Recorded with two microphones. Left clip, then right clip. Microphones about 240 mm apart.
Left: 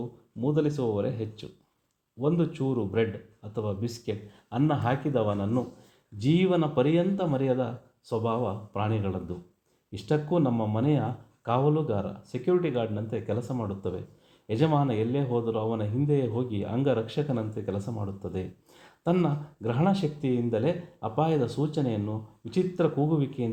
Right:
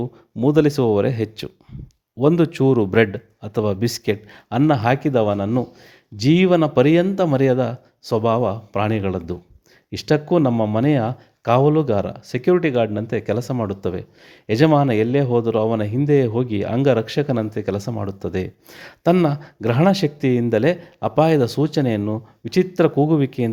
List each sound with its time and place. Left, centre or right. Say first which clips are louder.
0.3 s speech: right 11 dB; right